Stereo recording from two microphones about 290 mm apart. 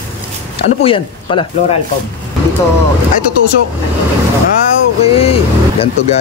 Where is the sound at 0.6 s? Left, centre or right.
Centre.